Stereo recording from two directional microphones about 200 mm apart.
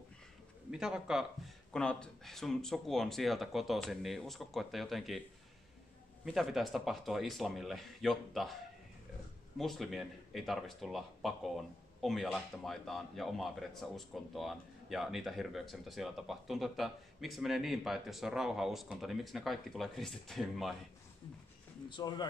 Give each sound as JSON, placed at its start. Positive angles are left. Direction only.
{"t": 0.7, "sound": "speech", "side_deg": -5}
{"t": 6.2, "sound": "speech", "side_deg": 0}
{"t": 9.6, "sound": "speech", "side_deg": 0}
{"t": 21.8, "sound": "speech", "side_deg": 20}